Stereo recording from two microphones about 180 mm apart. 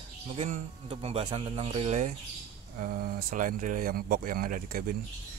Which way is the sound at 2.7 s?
50° right (ahead or behind).